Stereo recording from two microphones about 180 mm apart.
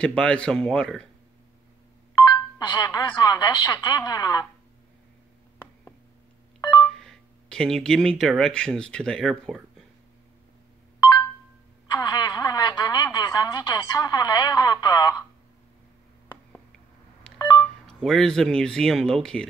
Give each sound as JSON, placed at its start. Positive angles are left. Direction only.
{"t": 0.0, "sound": "speech", "side_deg": 5}
{"t": 2.2, "sound": "a woman's voice", "side_deg": 20}
{"t": 6.8, "sound": "telephone dialing", "side_deg": 5}
{"t": 8.2, "sound": "speech", "side_deg": 0}
{"t": 11.9, "sound": "a woman's voice", "side_deg": 25}
{"t": 17.3, "sound": "telephone dialing", "side_deg": 5}
{"t": 17.6, "sound": "speech", "side_deg": 5}